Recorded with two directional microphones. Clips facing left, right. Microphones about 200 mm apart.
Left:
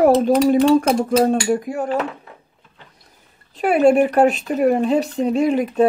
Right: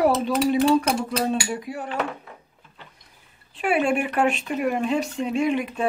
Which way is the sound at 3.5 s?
40° left (ahead or behind).